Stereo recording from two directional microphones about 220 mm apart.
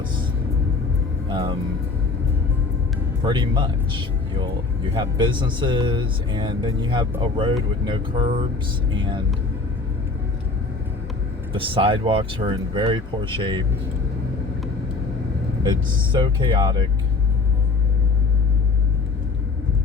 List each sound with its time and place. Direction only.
1.3 s speech: 20° right (ahead or behind)
3.2 s speech: 20° right (ahead or behind)
11.5 s speech: 25° right (ahead or behind)
16.1 s speech: 20° right (ahead or behind)